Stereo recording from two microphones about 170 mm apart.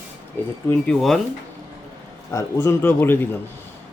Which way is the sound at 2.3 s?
15° left (ahead or behind).